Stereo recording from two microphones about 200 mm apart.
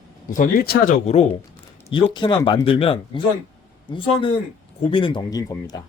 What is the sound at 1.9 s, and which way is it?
Speech, 25° left (ahead or behind).